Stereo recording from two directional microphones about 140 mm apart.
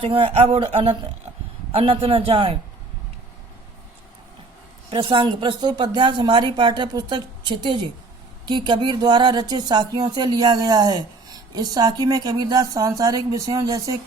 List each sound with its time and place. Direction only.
0.0 s a man's voice: 40° right (ahead or behind)
4.9 s speech: 35° right (ahead or behind)